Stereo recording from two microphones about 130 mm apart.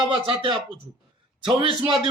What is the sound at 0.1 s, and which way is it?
Speech, 45° right (ahead or behind).